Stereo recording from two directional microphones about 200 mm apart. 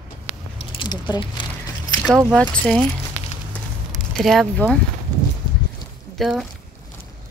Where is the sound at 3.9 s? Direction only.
Centre (ahead or behind).